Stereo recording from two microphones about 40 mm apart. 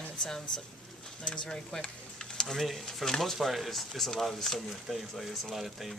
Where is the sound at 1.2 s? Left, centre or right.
Left.